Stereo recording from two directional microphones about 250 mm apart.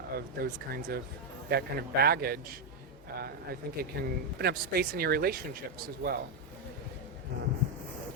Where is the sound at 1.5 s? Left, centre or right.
Right.